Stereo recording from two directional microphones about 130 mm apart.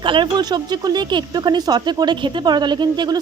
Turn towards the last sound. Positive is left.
turn(degrees=-35)  # may be behind; listen again after turning